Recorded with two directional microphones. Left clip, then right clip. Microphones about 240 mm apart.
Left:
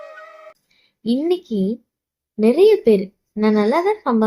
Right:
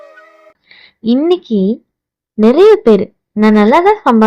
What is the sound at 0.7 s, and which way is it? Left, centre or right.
A woman's voice, right.